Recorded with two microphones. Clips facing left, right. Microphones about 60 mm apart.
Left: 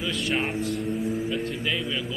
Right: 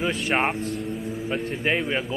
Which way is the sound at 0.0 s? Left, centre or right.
Right.